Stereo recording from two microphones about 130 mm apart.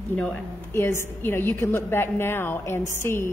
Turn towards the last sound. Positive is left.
turn(degrees=20)  # may be behind; listen again after turning